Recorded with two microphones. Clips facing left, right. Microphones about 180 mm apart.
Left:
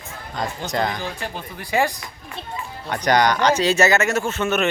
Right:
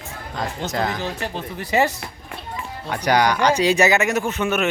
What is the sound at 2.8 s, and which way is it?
Speech, 10° right (ahead or behind).